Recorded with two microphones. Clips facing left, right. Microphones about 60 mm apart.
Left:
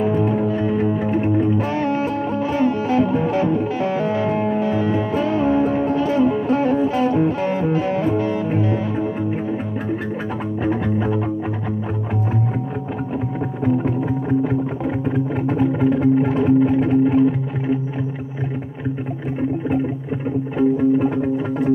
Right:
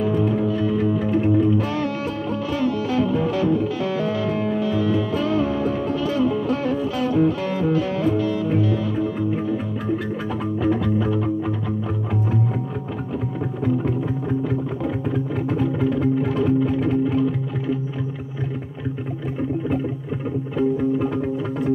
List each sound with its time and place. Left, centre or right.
0.0 s music: left
10.6 s music: left
15.0 s music: left
20.5 s music: left